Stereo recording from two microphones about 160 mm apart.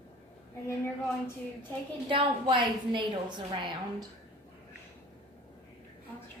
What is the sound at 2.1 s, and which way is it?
A woman's voice, 30° right (ahead or behind).